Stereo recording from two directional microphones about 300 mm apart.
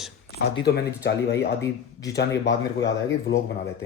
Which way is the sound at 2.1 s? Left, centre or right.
Left.